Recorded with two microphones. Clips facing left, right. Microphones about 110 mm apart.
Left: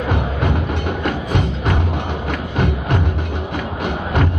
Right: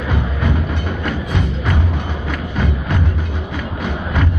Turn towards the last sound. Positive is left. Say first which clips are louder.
# left 1 dB
turn(degrees=60)  # may be behind; listen again after turning